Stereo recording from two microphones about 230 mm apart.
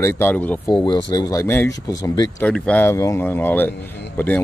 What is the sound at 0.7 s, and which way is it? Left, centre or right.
Speech, centre.